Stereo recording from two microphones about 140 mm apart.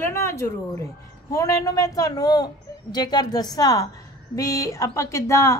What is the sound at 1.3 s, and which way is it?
A woman's voice, 25° left (ahead or behind).